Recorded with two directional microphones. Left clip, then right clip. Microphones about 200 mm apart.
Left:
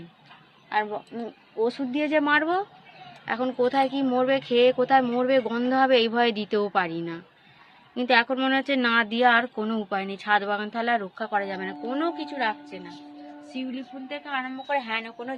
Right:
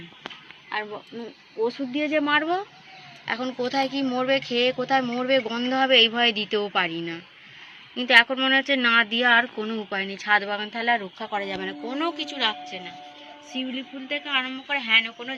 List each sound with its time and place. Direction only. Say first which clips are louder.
1.6 s a woman's voice: even; 60° left (ahead or behind); by 15.4 s 35° left (ahead or behind)